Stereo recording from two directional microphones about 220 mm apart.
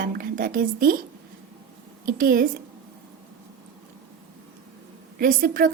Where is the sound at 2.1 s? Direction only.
40° right (ahead or behind).